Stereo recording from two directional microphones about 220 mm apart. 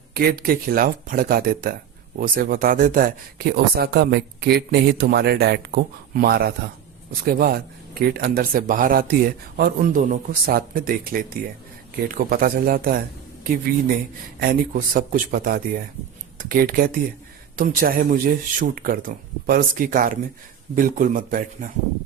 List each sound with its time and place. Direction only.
0.1 s speech: 45° right (ahead or behind)
14.4 s speech: 40° right (ahead or behind)